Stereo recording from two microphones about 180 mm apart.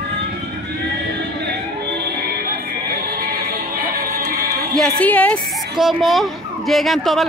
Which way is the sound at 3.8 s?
50° right (ahead or behind).